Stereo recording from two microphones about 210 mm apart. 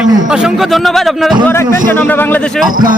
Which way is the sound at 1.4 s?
10° left (ahead or behind).